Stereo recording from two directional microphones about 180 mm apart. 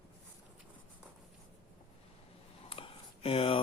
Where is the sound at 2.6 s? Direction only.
30° left (ahead or behind).